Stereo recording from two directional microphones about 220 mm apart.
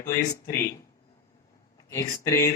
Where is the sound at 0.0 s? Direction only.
40° left (ahead or behind).